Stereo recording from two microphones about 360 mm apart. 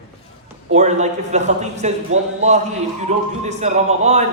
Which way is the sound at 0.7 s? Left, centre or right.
Centre.